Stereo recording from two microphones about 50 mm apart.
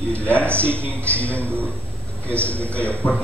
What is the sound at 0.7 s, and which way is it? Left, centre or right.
Speech, right.